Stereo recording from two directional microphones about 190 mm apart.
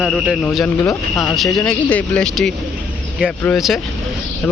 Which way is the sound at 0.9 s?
15° left (ahead or behind).